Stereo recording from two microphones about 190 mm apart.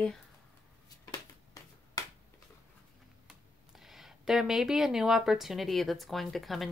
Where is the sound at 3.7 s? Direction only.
Centre (ahead or behind).